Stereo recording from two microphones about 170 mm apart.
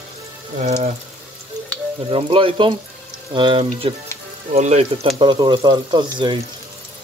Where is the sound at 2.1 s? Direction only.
30° right (ahead or behind).